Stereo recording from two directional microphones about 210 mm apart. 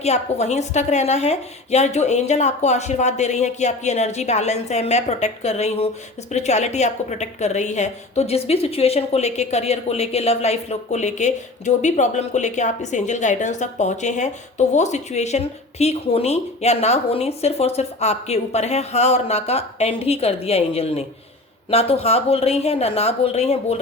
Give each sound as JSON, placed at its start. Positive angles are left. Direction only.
{"t": 0.0, "sound": "a woman's voice", "side_deg": 30}